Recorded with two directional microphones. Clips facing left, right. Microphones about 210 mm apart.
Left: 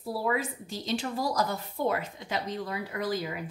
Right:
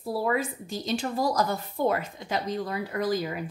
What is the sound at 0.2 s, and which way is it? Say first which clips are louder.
A woman's voice: right 2 dB; 45° right (ahead or behind).